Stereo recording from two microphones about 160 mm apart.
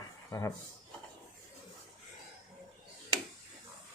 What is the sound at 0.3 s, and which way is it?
Speech, 20° left (ahead or behind).